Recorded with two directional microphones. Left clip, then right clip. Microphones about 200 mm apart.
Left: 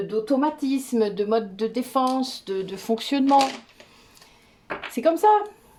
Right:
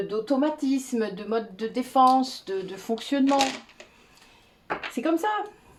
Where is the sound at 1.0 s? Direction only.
45° left (ahead or behind).